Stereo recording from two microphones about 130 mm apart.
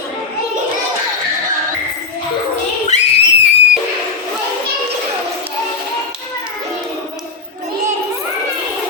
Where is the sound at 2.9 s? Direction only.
60° left (ahead or behind).